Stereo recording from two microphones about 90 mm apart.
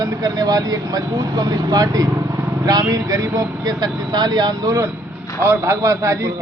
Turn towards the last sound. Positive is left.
turn(degrees=-35)  # may be behind; listen again after turning